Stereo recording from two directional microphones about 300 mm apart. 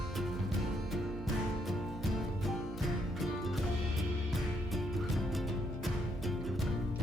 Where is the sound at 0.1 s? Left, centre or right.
Centre.